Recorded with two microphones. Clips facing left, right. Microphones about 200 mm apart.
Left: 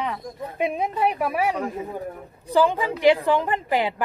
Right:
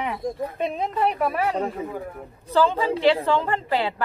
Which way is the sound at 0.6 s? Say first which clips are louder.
Left 2 dB; 10° left (ahead or behind).